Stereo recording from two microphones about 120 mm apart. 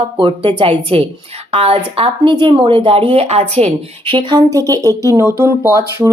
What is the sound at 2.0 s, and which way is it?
A woman's voice, 45° right (ahead or behind).